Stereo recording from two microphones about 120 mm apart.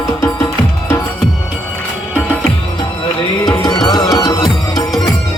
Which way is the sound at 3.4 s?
35° left (ahead or behind).